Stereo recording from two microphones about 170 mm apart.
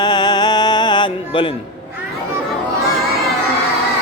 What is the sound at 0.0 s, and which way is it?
Music, 25° left (ahead or behind).